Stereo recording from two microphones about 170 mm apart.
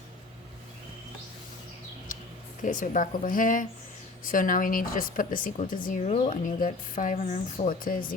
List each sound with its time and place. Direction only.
2.6 s speech: 50° left (ahead or behind)